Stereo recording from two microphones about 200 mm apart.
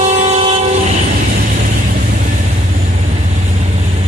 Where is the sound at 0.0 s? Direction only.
30° right (ahead or behind).